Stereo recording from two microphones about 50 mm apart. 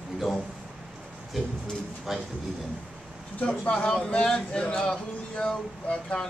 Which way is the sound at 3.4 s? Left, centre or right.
Left.